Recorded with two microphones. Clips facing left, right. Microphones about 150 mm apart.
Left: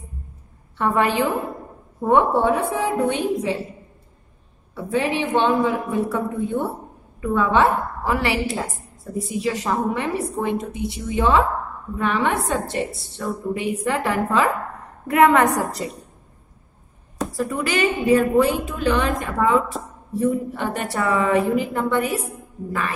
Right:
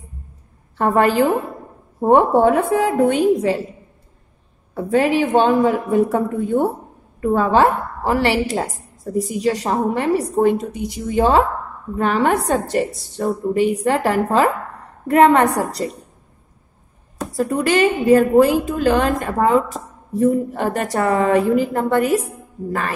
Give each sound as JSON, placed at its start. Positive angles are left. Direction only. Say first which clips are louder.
{"t": 0.7, "sound": "a woman's voice", "louder": "right 5 dB", "side_deg": -40}
{"t": 4.7, "sound": "a woman's voice", "louder": "right 6 dB", "side_deg": -40}
{"t": 17.4, "sound": "a woman's voice", "louder": "right 6 dB", "side_deg": -35}